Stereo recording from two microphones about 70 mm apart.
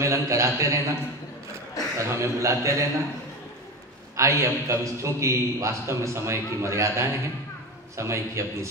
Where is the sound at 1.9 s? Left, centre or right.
Right.